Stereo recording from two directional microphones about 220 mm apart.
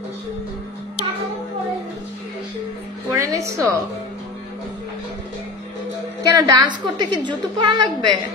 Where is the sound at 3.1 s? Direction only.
15° right (ahead or behind).